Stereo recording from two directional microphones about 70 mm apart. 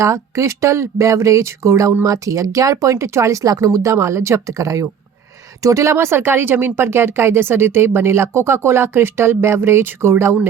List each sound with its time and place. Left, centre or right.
0.0 s speech: right